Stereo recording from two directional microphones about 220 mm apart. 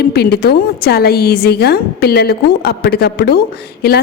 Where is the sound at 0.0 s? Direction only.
45° left (ahead or behind).